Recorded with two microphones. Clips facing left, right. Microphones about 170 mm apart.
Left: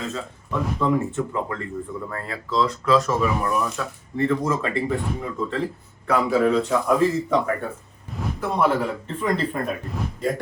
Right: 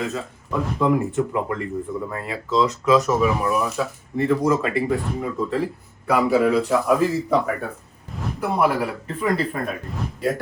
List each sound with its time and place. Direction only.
0.0 s speech: centre (ahead or behind); by 3.2 s 20° right (ahead or behind)
3.2 s speech: 5° right (ahead or behind)